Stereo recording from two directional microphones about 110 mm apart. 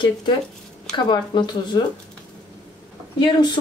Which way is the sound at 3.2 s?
40° left (ahead or behind).